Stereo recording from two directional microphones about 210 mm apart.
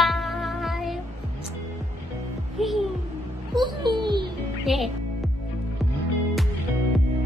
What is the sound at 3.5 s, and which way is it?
Music, 20° right (ahead or behind).